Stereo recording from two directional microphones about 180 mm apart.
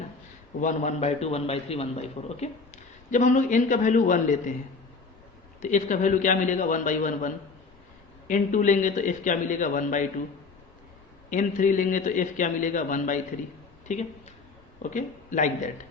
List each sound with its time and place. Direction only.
0.6 s a man's voice: 45° left (ahead or behind)
5.6 s a man's voice: 45° left (ahead or behind)
11.3 s a man's voice: 45° left (ahead or behind)